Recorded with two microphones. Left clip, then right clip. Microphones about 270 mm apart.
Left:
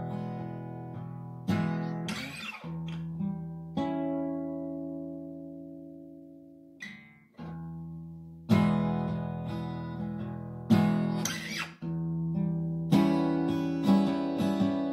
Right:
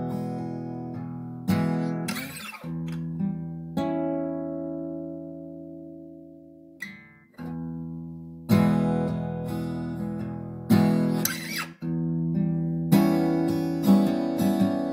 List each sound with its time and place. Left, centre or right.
0.0 s music: right
1.5 s guitar: right
2.8 s music: right
8.5 s music: right